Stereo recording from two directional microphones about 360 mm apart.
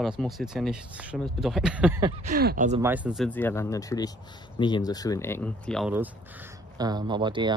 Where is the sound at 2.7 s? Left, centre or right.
Centre.